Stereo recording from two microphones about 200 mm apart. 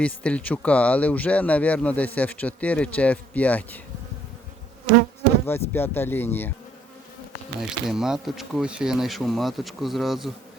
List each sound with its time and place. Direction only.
0.0 s speech: 5° left (ahead or behind)
5.5 s speech: 10° left (ahead or behind)
7.6 s speech: centre (ahead or behind)